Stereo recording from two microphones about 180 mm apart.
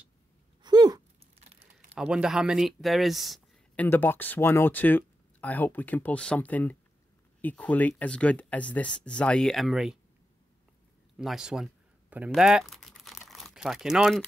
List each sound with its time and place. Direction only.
0.6 s sigh: 25° right (ahead or behind)
1.4 s typing: 35° right (ahead or behind)
2.0 s speech: 5° right (ahead or behind)
11.1 s a sound: 5° right (ahead or behind)
12.3 s crumpling: 5° right (ahead or behind)